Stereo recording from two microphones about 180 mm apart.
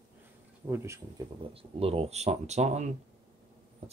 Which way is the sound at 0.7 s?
15° right (ahead or behind).